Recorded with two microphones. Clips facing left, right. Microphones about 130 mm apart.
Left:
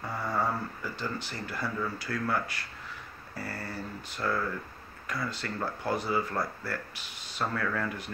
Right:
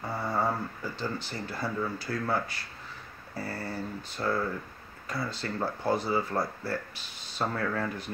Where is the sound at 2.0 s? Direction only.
30° right (ahead or behind).